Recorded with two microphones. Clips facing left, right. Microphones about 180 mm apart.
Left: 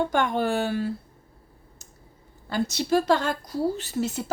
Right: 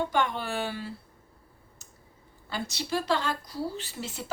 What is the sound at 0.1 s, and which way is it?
Speech, 50° left (ahead or behind).